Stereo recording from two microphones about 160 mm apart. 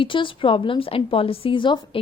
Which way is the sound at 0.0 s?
30° left (ahead or behind).